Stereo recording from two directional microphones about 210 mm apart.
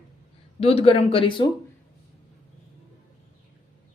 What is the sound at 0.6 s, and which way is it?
Speech, 30° left (ahead or behind).